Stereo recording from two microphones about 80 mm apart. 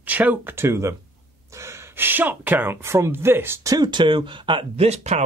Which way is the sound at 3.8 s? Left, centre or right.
Right.